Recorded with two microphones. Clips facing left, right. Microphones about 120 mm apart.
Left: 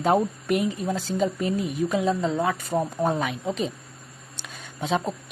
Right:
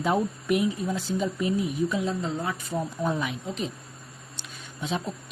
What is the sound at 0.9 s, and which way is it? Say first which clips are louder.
A woman's voice: left 3 dB; 60° left (ahead or behind).